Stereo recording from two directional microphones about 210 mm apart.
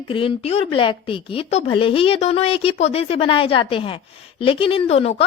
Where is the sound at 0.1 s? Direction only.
25° left (ahead or behind).